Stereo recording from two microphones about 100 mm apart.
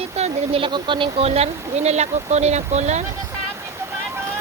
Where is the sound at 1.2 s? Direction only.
90° right.